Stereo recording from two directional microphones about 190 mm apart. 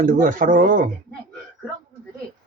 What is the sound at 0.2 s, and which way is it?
Speech, 45° right (ahead or behind).